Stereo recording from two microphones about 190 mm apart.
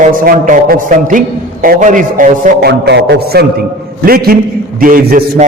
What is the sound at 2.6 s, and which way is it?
A man's voice, 55° right (ahead or behind).